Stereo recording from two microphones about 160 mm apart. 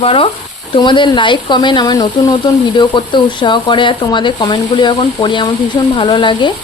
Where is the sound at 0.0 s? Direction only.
35° left (ahead or behind).